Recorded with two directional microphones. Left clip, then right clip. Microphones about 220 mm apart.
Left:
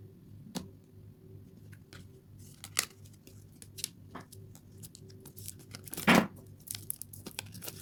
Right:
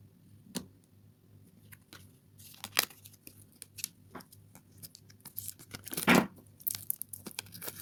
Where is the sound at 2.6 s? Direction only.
15° right (ahead or behind).